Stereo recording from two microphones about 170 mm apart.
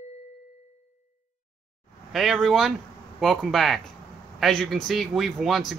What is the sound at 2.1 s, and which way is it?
Speech, centre (ahead or behind).